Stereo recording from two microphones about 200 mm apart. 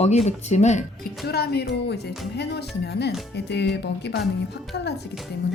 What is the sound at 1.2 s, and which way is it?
Speech, 50° left (ahead or behind).